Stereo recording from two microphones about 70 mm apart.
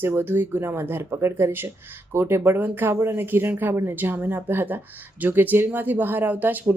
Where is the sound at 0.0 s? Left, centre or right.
Right.